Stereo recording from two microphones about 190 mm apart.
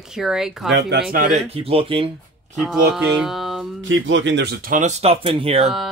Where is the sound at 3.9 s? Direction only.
75° right (ahead or behind); by 5.7 s 30° right (ahead or behind).